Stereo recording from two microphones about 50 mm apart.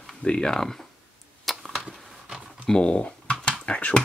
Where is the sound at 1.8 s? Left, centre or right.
Centre.